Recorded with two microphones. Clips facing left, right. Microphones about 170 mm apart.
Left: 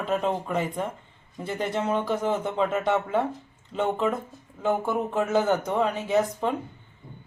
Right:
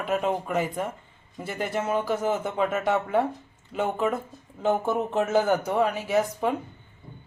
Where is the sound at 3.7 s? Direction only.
10° right (ahead or behind).